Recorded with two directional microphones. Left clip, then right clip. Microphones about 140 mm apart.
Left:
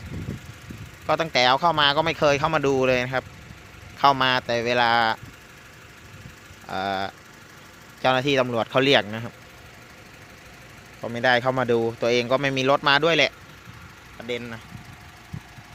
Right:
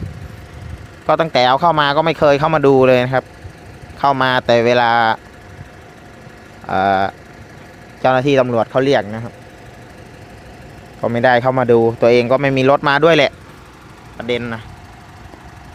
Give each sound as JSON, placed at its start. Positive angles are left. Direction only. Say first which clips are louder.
{"t": 1.0, "sound": "a man's voice", "louder": "right 7 dB", "side_deg": -10}
{"t": 4.3, "sound": "speech", "louder": "right 10 dB", "side_deg": -15}
{"t": 6.7, "sound": "speech", "louder": "right 12 dB", "side_deg": -5}
{"t": 8.7, "sound": "speech", "louder": "right 5 dB", "side_deg": 20}
{"t": 11.0, "sound": "speech", "louder": "right 8 dB", "side_deg": -5}